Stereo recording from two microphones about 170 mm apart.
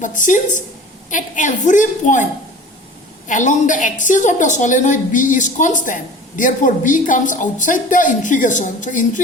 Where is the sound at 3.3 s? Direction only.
50° left (ahead or behind).